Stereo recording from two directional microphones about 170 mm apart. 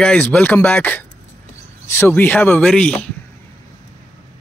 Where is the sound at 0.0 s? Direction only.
5° left (ahead or behind).